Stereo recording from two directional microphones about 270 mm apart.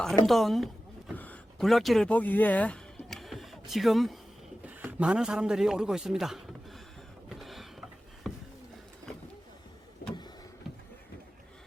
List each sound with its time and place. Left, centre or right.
0.3 s a man's voice: centre
7.3 s a sound: centre
10.0 s vehicle: left